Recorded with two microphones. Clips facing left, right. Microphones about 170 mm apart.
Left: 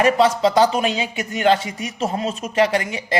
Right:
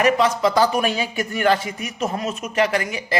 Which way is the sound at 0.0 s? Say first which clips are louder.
Left 2 dB; 30° left (ahead or behind).